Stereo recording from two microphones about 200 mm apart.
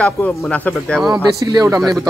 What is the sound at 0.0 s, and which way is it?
Speech, 5° left (ahead or behind).